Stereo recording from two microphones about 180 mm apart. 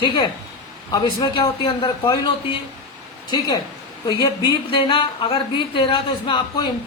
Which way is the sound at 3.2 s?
25° left (ahead or behind).